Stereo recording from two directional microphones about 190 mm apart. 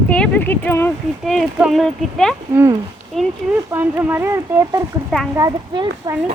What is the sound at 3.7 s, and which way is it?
Speech, 10° right (ahead or behind).